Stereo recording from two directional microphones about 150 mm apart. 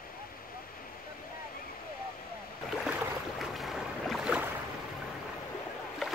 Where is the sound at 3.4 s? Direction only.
Centre (ahead or behind).